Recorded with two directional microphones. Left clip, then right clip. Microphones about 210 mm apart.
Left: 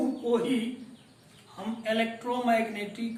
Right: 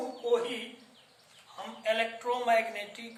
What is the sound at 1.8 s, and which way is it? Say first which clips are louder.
Speech: even; 25° right (ahead or behind).